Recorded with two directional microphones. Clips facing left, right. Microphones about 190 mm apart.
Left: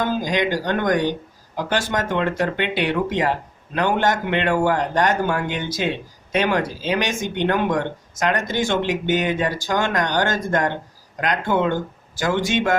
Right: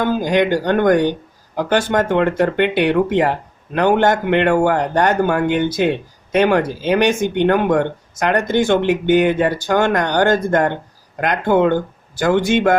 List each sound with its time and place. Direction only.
0.0 s a man's voice: 55° right (ahead or behind)